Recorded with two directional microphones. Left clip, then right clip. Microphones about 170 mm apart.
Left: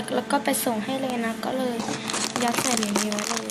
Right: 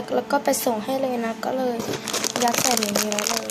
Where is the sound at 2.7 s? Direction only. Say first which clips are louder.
Right 3 dB; 25° right (ahead or behind).